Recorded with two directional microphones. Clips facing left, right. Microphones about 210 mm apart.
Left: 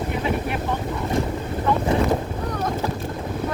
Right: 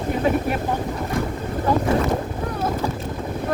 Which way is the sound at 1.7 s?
35° right (ahead or behind).